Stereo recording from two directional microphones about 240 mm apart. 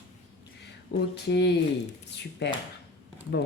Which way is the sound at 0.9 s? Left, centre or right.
Left.